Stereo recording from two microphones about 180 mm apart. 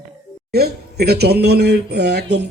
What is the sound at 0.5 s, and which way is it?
Speech, 60° right (ahead or behind).